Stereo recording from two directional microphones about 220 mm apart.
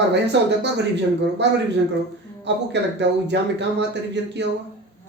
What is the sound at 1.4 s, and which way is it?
Speech, 50° right (ahead or behind).